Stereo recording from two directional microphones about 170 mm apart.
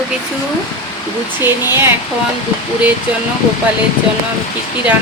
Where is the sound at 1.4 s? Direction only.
15° right (ahead or behind).